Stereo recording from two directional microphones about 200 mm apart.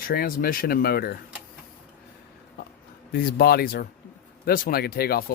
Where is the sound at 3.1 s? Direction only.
50° left (ahead or behind).